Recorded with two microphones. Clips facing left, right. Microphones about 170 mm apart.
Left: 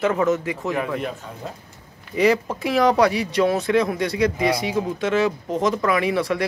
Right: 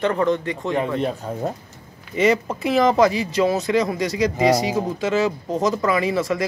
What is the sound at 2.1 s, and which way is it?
Speech, centre (ahead or behind).